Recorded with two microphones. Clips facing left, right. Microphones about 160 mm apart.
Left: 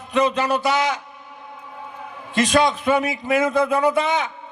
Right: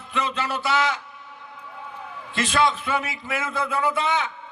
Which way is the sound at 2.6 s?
15° left (ahead or behind).